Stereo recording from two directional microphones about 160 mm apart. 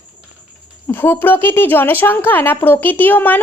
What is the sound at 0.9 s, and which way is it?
A woman's voice, 15° left (ahead or behind).